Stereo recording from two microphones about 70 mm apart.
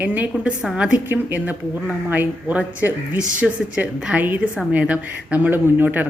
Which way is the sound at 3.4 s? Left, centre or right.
Centre.